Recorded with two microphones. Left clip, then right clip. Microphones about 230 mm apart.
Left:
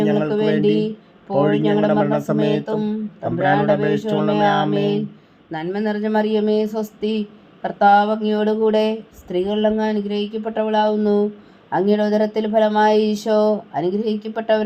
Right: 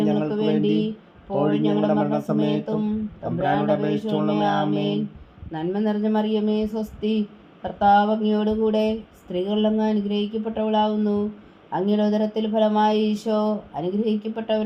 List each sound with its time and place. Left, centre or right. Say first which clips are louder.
0.0 s music: left 5 dB; left
1.3 s speech: left 5 dB; left